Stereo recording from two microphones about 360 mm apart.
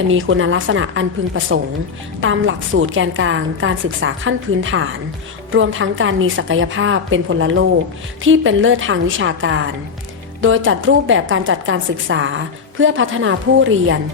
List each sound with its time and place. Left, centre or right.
0.1 s a woman's voice: right